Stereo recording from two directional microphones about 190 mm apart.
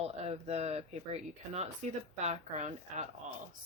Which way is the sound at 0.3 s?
35° right (ahead or behind).